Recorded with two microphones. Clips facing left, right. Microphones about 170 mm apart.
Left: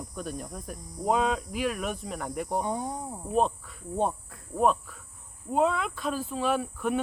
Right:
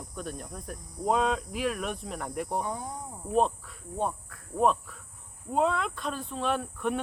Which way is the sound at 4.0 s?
25° left (ahead or behind).